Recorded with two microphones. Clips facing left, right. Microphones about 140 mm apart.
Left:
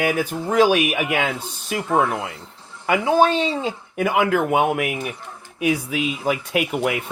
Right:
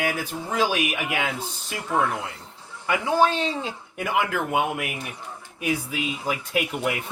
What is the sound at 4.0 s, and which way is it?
Speech, 65° left (ahead or behind).